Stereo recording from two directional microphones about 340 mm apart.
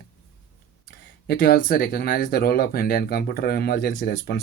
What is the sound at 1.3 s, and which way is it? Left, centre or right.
Speech, left.